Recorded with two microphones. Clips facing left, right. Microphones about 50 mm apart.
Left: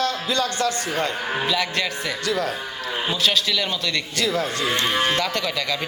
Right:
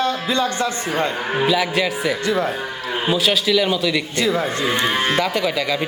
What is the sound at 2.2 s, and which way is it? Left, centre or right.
Speech, right.